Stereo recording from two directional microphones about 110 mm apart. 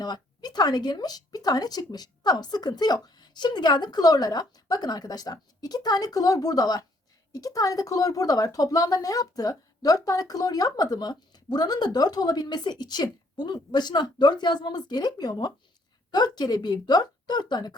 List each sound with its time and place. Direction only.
0.0 s speech: 40° left (ahead or behind)